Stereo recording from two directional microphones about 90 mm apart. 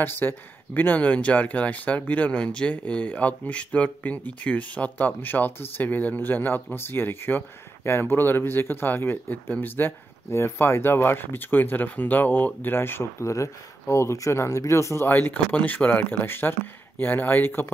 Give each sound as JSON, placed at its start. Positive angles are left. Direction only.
{"t": 0.0, "sound": "speech", "side_deg": 25}